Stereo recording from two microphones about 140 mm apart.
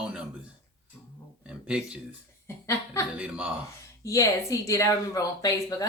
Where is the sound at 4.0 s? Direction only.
20° left (ahead or behind).